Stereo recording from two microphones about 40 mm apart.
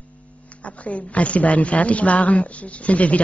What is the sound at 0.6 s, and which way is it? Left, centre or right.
Speech, left.